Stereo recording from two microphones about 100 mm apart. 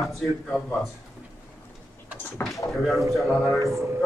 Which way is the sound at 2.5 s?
Centre (ahead or behind).